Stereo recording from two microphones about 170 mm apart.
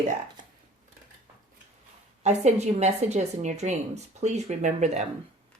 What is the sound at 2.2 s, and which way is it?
A woman's voice, 40° right (ahead or behind).